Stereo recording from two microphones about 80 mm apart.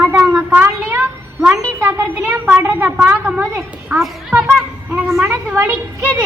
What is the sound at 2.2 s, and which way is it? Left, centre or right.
A child's voice, centre.